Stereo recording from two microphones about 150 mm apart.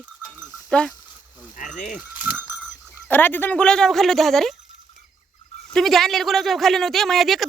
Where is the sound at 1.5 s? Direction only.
55° left (ahead or behind).